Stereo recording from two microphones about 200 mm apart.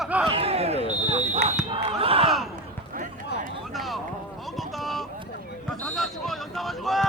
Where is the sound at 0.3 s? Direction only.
30° right (ahead or behind).